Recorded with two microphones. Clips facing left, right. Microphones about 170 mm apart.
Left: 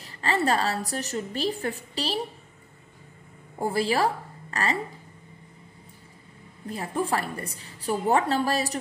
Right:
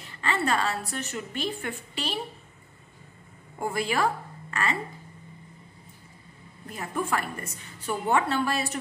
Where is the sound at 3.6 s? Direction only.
35° left (ahead or behind).